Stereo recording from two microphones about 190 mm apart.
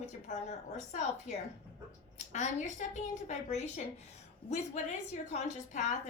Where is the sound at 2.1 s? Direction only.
40° left (ahead or behind).